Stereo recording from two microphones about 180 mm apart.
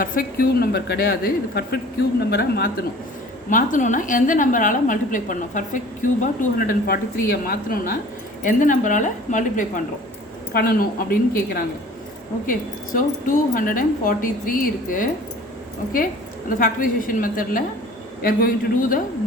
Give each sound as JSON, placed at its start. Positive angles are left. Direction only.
{"t": 0.0, "sound": "speech", "side_deg": 55}
{"t": 3.5, "sound": "a woman's voice", "side_deg": 45}
{"t": 16.5, "sound": "a woman's voice", "side_deg": 50}